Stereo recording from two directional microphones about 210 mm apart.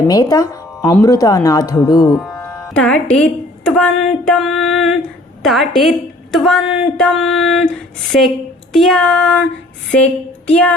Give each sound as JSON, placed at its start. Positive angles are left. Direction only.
{"t": 0.1, "sound": "speech", "side_deg": 15}
{"t": 2.1, "sound": "a woman's voice", "side_deg": 0}
{"t": 8.7, "sound": "a woman's voice", "side_deg": 0}